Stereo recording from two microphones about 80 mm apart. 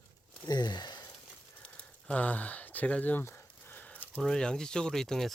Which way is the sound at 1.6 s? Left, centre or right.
Centre.